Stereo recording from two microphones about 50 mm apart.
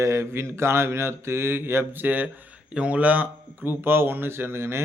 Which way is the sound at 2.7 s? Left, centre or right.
Right.